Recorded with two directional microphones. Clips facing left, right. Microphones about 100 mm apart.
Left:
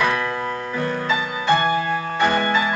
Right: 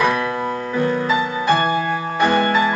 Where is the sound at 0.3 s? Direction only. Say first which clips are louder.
Right 3 dB; 10° right (ahead or behind).